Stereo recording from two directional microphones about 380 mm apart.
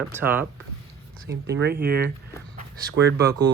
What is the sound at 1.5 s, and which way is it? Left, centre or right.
Speech, right.